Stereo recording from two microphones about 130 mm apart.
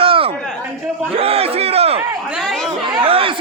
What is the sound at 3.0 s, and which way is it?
Chatter, 45° right (ahead or behind).